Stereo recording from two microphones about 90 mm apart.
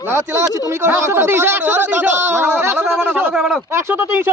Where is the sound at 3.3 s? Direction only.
5° right (ahead or behind).